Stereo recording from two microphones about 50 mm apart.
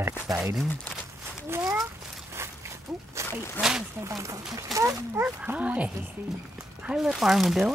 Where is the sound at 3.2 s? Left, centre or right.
Right.